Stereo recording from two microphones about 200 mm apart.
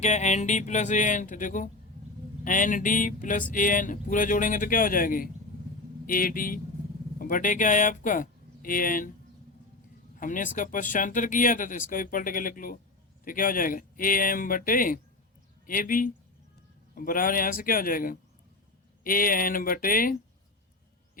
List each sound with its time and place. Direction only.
0.0 s speech: 35° left (ahead or behind)
10.2 s speech: 40° left (ahead or behind)